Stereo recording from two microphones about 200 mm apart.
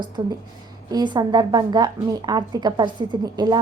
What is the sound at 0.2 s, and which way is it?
A woman's voice, 25° right (ahead or behind).